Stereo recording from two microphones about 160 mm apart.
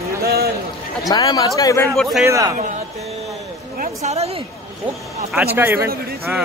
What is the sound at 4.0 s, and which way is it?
Speech, 40° right (ahead or behind).